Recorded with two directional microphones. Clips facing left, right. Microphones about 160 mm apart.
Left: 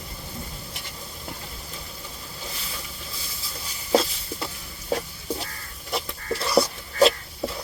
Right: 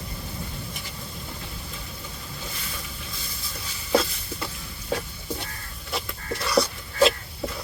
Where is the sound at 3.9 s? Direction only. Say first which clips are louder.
Left 1 dB; 30° left (ahead or behind).